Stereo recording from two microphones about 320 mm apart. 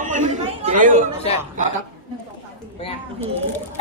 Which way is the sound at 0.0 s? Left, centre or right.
Right.